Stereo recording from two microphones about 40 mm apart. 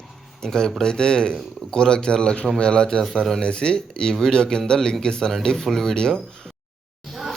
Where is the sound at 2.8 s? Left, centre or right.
Centre.